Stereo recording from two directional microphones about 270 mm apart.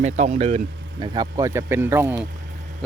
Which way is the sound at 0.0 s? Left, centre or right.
Right.